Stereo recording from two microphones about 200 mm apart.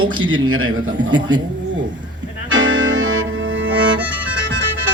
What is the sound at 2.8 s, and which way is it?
Music, 75° right (ahead or behind).